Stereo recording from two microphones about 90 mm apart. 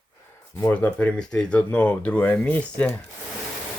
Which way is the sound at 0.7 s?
15° left (ahead or behind).